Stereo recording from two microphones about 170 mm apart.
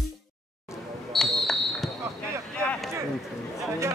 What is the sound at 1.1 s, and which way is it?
Smoke detector, centre (ahead or behind).